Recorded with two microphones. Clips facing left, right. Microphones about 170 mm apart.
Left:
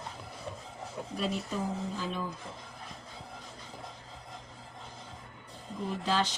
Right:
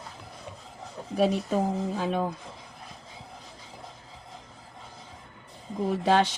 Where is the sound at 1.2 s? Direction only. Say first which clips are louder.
Right 10 dB; 65° right (ahead or behind).